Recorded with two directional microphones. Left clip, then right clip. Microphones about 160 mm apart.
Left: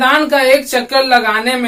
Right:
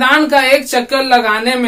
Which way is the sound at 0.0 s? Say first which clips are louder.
Right 1 dB; 50° right (ahead or behind).